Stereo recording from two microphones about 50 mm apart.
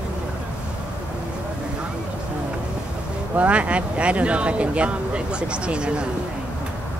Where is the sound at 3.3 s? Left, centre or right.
Right.